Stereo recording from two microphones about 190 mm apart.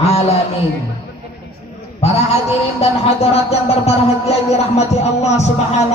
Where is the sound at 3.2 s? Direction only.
35° left (ahead or behind).